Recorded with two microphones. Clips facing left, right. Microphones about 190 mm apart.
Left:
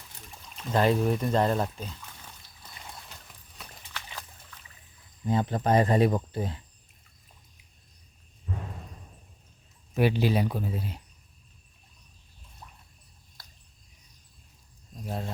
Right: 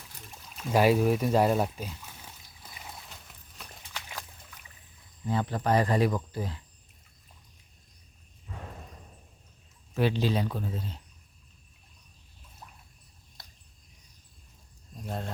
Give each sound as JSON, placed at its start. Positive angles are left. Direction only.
{"t": 0.4, "sound": "a sound", "side_deg": -5}
{"t": 3.9, "sound": "dog", "side_deg": -15}
{"t": 5.2, "sound": "speech", "side_deg": 20}
{"t": 9.9, "sound": "speech", "side_deg": 10}
{"t": 13.4, "sound": "a sound", "side_deg": -20}
{"t": 15.0, "sound": "speech", "side_deg": 5}